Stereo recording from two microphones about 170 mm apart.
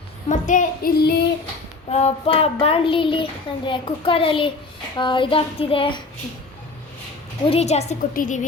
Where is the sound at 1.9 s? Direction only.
40° left (ahead or behind).